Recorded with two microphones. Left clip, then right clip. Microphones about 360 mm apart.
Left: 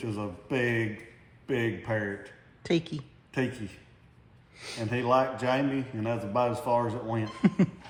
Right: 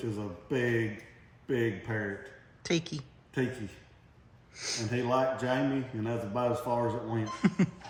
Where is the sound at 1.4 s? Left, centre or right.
Centre.